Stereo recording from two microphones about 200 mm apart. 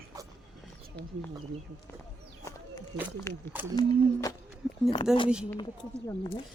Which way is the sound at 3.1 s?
15° left (ahead or behind).